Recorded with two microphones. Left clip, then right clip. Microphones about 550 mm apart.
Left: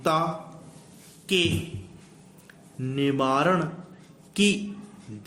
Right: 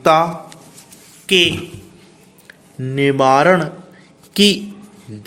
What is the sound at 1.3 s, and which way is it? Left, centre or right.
Speech, left.